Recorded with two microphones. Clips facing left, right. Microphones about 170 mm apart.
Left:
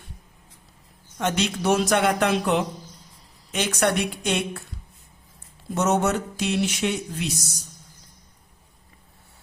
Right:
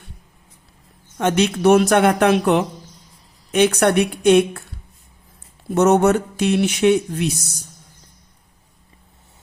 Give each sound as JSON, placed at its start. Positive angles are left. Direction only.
{"t": 1.2, "sound": "speech", "side_deg": -55}
{"t": 5.7, "sound": "speech", "side_deg": -60}